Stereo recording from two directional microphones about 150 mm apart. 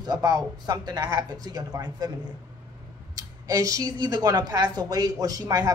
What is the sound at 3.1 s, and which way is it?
A woman's voice, 25° right (ahead or behind).